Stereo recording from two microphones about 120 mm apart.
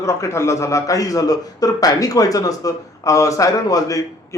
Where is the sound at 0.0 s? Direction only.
25° left (ahead or behind).